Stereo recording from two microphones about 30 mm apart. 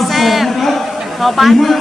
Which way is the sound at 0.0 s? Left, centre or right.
Centre.